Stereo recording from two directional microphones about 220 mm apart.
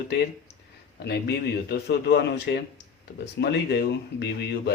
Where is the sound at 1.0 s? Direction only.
45° left (ahead or behind).